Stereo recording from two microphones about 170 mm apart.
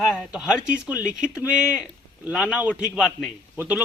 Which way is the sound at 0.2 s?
5° right (ahead or behind).